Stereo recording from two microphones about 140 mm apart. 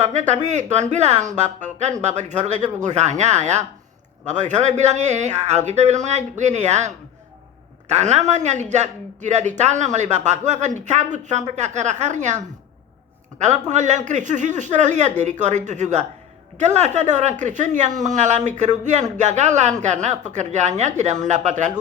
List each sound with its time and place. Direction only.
0.0 s speech: 55° right (ahead or behind)
13.4 s speech: 55° right (ahead or behind)